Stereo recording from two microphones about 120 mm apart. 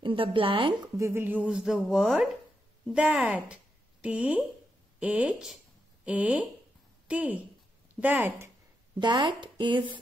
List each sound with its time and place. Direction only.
0.0 s speech: 45° right (ahead or behind)
0.9 s speech: 20° right (ahead or behind)
9.0 s speech: 40° right (ahead or behind)